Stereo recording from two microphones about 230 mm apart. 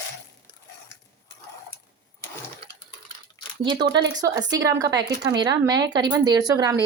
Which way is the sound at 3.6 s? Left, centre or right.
Centre.